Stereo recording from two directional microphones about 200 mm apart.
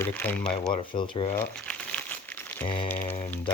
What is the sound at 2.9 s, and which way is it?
Speech, 10° left (ahead or behind).